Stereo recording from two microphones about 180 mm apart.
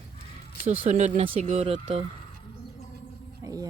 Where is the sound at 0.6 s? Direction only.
40° right (ahead or behind).